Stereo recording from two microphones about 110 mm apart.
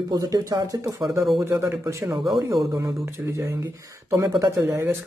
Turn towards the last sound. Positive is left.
turn(degrees=-25)  # may be behind; listen again after turning